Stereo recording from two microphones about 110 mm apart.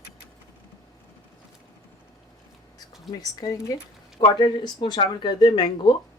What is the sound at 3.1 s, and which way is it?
Speech, 35° left (ahead or behind).